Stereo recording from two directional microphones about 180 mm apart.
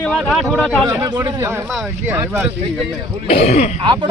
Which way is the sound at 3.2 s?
35° left (ahead or behind).